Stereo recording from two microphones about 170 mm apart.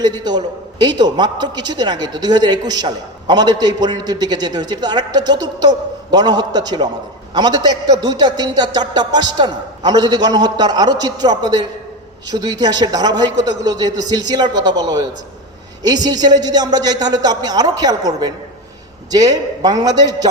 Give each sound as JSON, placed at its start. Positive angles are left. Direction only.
{"t": 0.0, "sound": "a man's voice", "side_deg": -25}